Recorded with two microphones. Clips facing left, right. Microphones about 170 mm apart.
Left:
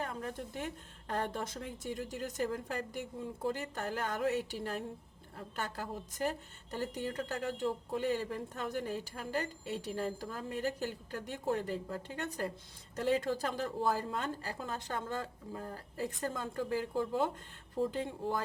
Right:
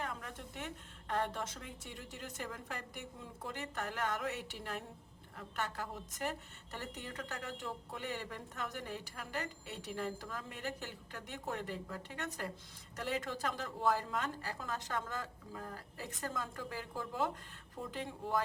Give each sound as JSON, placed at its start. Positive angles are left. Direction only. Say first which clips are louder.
{"t": 0.0, "sound": "a woman's voice", "louder": "left 5 dB", "side_deg": 35}